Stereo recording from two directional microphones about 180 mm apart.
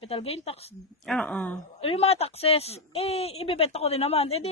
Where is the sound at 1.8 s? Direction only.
35° left (ahead or behind).